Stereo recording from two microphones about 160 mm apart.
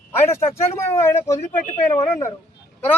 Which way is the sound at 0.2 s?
15° left (ahead or behind).